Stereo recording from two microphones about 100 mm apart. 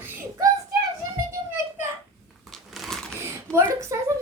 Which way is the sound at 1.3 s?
25° right (ahead or behind).